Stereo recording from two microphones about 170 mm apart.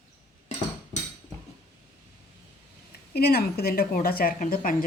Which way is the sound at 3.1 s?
70° left (ahead or behind).